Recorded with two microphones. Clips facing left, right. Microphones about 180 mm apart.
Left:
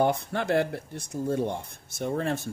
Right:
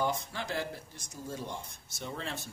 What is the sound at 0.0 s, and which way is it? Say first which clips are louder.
Speech: left 8 dB; 60° left (ahead or behind).